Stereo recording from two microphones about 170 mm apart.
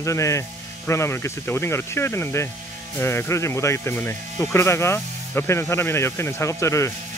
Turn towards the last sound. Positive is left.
turn(degrees=15)  # may be behind; listen again after turning